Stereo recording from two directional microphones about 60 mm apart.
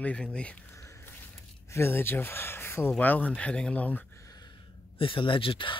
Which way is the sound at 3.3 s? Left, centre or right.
Centre.